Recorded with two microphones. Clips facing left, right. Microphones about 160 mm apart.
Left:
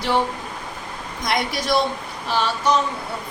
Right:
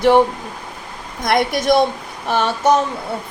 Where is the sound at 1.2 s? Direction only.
55° right (ahead or behind).